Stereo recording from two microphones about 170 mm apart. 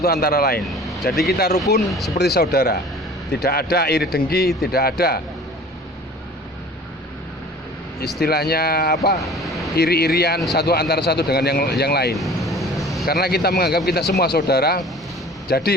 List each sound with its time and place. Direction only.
0.0 s speech: 65° left (ahead or behind)
0.6 s vehicle: centre (ahead or behind)
1.3 s a man's voice: 65° left (ahead or behind)
1.8 s speech: centre (ahead or behind)
2.1 s a man's voice: 70° left (ahead or behind)
8.0 s a man's voice: 70° left (ahead or behind)
9.2 s vehicle: centre (ahead or behind)
9.7 s a man's voice: 70° left (ahead or behind)
12.1 s vehicle: centre (ahead or behind)
13.1 s a man's voice: 70° left (ahead or behind)